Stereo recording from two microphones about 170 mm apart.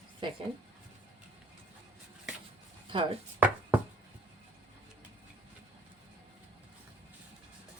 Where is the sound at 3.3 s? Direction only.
10° right (ahead or behind).